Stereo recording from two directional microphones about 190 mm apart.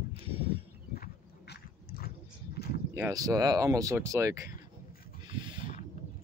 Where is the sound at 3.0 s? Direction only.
15° right (ahead or behind).